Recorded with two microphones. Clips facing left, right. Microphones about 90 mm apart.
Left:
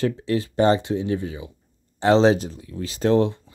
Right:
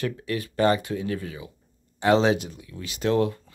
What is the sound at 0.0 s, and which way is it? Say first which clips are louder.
Speech: left 6 dB; 25° left (ahead or behind).